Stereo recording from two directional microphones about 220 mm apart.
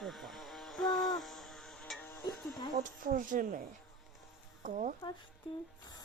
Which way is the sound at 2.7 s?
40° right (ahead or behind).